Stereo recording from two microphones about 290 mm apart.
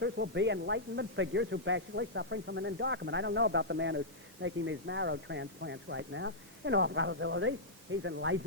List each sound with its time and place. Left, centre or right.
0.0 s speech: right